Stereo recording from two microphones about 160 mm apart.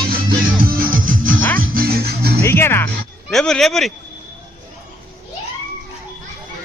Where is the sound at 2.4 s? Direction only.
15° left (ahead or behind).